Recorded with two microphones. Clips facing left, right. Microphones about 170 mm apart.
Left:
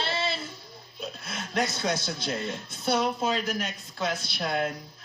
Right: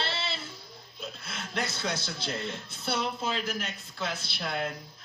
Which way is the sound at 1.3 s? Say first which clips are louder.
Left 5 dB; 50° left (ahead or behind).